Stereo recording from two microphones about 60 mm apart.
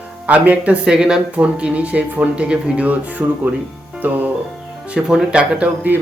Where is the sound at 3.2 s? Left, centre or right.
Right.